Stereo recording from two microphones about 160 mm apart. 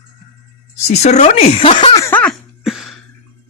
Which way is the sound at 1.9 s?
15° left (ahead or behind).